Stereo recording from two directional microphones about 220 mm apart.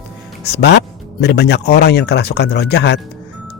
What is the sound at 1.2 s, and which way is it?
Speech, 50° left (ahead or behind).